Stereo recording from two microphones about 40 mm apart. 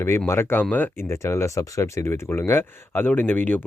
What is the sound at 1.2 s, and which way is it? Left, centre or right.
Speech, left.